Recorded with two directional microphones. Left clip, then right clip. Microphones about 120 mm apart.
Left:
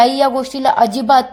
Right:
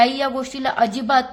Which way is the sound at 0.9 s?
Centre (ahead or behind).